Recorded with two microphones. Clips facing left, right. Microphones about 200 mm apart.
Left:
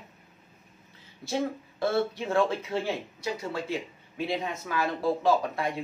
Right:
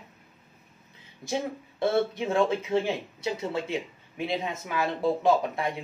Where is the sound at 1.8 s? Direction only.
20° right (ahead or behind).